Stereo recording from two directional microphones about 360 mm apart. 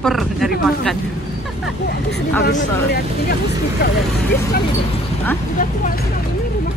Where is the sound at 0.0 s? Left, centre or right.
Centre.